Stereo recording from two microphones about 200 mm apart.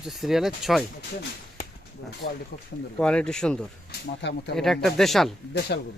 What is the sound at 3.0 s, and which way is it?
Speech, 5° left (ahead or behind).